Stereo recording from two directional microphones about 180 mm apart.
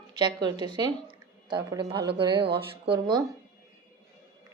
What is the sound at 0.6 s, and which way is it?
Speech, 25° right (ahead or behind).